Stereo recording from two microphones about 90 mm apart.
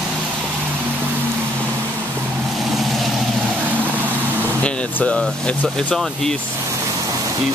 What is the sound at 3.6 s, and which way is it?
Vehicle, 20° right (ahead or behind).